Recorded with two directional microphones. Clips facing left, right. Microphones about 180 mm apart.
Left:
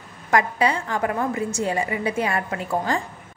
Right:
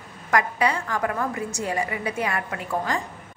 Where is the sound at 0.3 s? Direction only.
25° left (ahead or behind).